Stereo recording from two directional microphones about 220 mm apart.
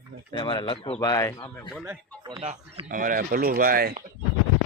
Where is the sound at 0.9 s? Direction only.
15° left (ahead or behind).